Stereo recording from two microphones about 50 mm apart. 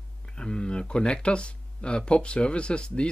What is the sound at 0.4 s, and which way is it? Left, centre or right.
Speech, centre.